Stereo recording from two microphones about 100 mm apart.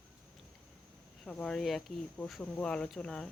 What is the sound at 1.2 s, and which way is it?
Speech, 10° left (ahead or behind).